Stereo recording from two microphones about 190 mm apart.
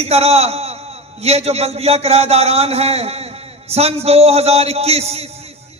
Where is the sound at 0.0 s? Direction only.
35° right (ahead or behind).